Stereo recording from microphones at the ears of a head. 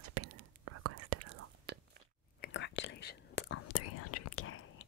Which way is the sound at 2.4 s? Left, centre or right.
Left.